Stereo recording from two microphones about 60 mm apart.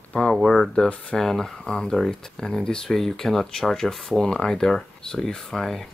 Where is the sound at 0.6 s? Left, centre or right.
Centre.